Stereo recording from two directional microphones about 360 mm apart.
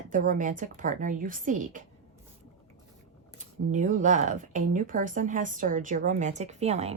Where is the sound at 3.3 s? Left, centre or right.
Centre.